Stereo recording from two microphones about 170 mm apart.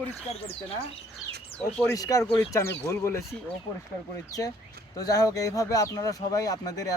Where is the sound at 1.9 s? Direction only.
20° left (ahead or behind).